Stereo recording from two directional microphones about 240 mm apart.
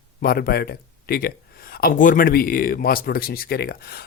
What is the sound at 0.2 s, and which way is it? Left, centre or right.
Speech, left.